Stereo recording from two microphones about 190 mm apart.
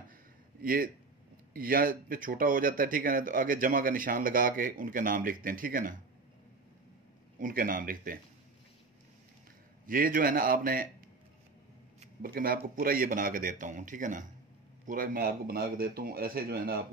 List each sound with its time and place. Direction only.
0.6 s speech: 50° right (ahead or behind)
7.3 s speech: 45° right (ahead or behind)
9.8 s speech: 45° right (ahead or behind)
12.2 s speech: 50° right (ahead or behind)